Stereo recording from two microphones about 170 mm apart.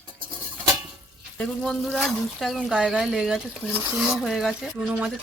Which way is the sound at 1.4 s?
5° left (ahead or behind).